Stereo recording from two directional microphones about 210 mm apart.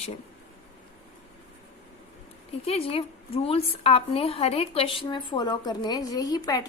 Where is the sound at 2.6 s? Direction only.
30° left (ahead or behind).